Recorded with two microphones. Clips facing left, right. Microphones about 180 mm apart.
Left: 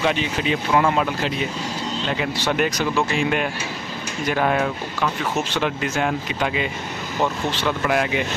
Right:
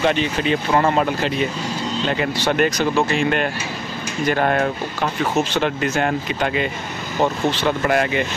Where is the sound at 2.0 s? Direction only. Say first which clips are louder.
Right 3 dB; centre (ahead or behind).